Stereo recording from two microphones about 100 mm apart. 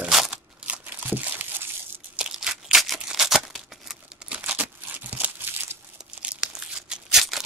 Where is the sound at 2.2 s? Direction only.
5° right (ahead or behind).